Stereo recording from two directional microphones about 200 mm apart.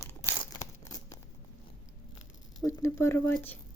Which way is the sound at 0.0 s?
15° left (ahead or behind).